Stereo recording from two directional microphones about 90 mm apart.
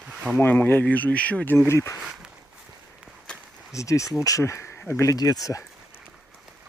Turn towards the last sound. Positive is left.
turn(degrees=40)  # may be behind; listen again after turning